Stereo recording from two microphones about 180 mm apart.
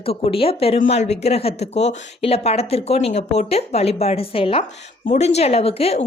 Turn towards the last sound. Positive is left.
turn(degrees=35)  # may be behind; listen again after turning